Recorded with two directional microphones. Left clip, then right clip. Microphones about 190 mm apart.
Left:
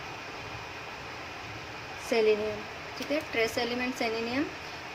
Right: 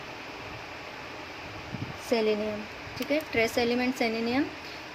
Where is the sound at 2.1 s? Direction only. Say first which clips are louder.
Even; 10° right (ahead or behind).